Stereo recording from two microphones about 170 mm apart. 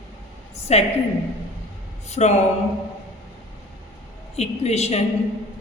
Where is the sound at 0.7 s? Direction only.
40° left (ahead or behind).